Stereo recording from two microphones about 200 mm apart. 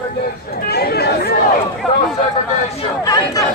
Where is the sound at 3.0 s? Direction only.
20° left (ahead or behind).